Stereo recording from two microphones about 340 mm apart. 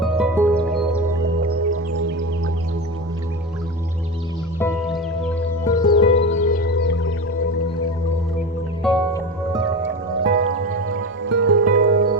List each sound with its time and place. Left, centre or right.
0.0 s music: centre
1.4 s music: right
4.6 s music: centre
6.5 s music: left
8.8 s music: centre
9.8 s music: right